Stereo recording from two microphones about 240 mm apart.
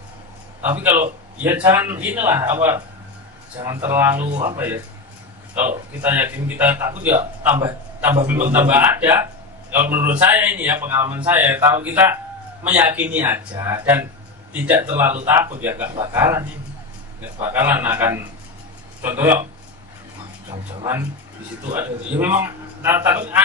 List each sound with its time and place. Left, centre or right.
0.6 s a man's voice: centre
4.2 s speech: right
5.6 s a man's voice: centre
21.7 s a man's voice: centre